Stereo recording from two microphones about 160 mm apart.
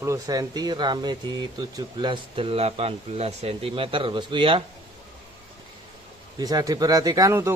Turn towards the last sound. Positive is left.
turn(degrees=-20)  # may be behind; listen again after turning